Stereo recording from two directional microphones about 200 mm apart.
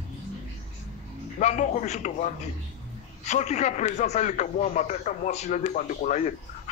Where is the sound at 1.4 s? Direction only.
35° left (ahead or behind).